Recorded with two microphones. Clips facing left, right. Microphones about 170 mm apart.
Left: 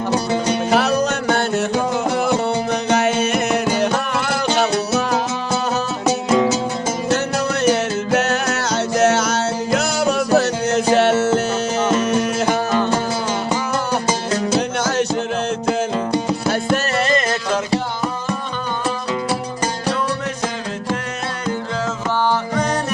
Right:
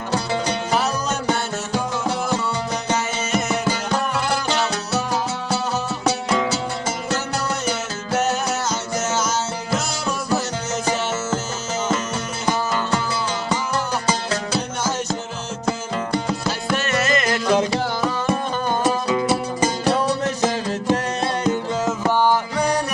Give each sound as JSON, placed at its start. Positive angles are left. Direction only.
{"t": 0.7, "sound": "music", "side_deg": 65}
{"t": 2.9, "sound": "music", "side_deg": 65}
{"t": 7.6, "sound": "music", "side_deg": 70}
{"t": 14.8, "sound": "music", "side_deg": 75}
{"t": 16.7, "sound": "music", "side_deg": 35}